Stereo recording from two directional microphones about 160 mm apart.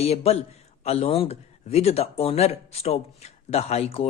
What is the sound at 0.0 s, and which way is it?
Speech, 40° left (ahead or behind).